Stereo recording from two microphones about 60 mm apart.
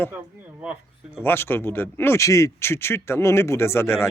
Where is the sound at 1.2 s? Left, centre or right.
Left.